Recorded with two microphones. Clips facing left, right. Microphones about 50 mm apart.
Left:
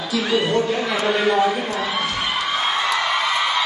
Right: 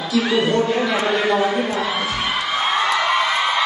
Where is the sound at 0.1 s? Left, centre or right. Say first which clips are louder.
Right 2 dB; centre.